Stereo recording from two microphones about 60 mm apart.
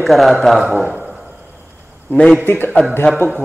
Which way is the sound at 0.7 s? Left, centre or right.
Right.